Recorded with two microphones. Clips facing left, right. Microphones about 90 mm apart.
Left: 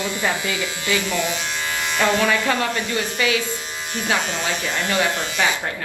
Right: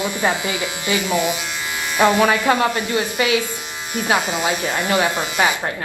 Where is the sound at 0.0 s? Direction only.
20° right (ahead or behind).